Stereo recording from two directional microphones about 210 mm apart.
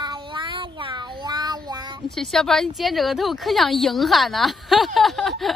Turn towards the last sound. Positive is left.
turn(degrees=0)  # may be behind; listen again after turning